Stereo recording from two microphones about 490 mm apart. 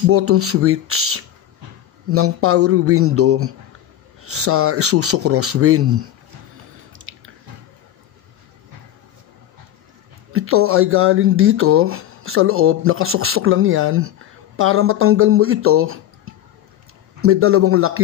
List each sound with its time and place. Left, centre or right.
0.1 s speech: right
6.9 s chewing: right
10.3 s speech: right